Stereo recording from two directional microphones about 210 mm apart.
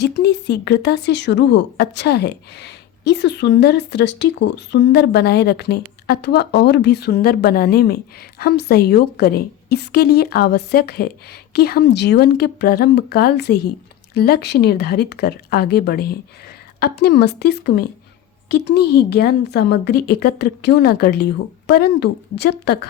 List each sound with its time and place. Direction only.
0.0 s speech: 55° left (ahead or behind)